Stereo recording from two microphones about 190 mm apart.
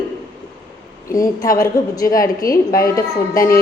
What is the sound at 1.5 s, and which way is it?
Speech, 20° left (ahead or behind).